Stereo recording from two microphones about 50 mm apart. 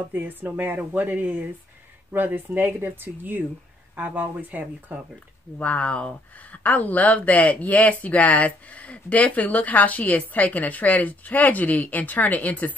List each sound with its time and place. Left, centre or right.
0.1 s speech: right
2.1 s speech: right
5.6 s speech: left